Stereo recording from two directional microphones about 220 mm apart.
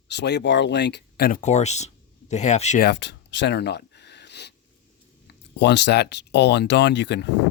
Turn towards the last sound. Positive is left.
turn(degrees=50)  # may be behind; listen again after turning